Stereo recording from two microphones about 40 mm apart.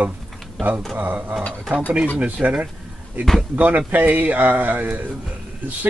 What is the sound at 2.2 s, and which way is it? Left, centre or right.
Speech, right.